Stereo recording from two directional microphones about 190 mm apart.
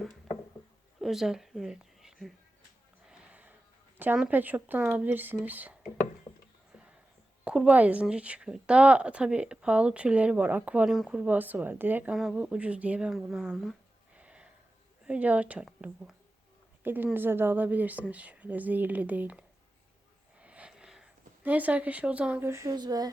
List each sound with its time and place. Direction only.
1.0 s speech: centre (ahead or behind)
3.1 s a sound: 5° right (ahead or behind)
3.9 s a woman's voice: 10° right (ahead or behind)
7.4 s a woman's voice: 5° right (ahead or behind)
14.2 s a sound: 5° right (ahead or behind)
15.0 s a woman's voice: 5° right (ahead or behind)